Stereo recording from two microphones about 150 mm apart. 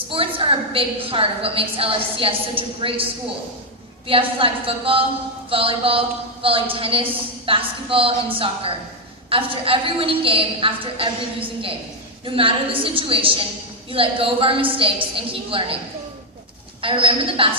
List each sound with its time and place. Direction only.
0.1 s a woman's voice: 35° right (ahead or behind)
16.8 s a woman's voice: 35° right (ahead or behind)